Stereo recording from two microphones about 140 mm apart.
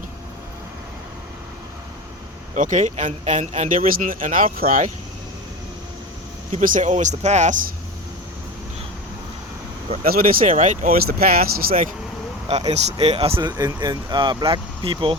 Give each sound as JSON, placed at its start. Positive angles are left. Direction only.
{"t": 2.6, "sound": "speech", "side_deg": -65}
{"t": 6.6, "sound": "speech", "side_deg": -65}
{"t": 10.1, "sound": "speech", "side_deg": -90}
{"t": 12.5, "sound": "speech", "side_deg": -50}
{"t": 13.5, "sound": "speech", "side_deg": -30}